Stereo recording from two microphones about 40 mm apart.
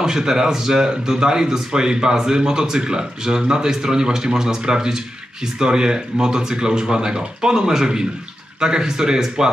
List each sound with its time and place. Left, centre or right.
0.0 s speech: centre